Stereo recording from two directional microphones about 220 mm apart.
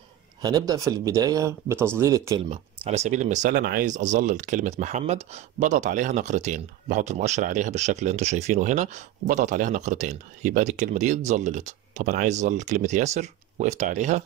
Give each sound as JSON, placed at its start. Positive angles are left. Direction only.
{"t": 0.4, "sound": "speech", "side_deg": -15}
{"t": 2.5, "sound": "speech", "side_deg": -30}